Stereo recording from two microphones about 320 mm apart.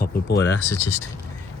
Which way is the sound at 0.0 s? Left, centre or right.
Left.